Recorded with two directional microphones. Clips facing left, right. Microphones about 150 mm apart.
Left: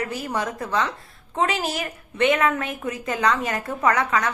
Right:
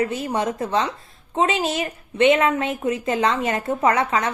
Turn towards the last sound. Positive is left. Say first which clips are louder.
# right 2 dB
turn(degrees=-25)  # may be behind; listen again after turning